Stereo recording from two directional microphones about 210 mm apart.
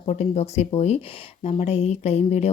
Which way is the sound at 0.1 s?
30° left (ahead or behind).